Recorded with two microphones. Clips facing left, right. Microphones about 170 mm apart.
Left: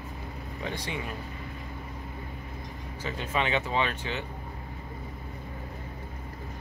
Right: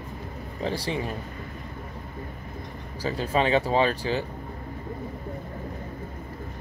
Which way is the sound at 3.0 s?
35° right (ahead or behind).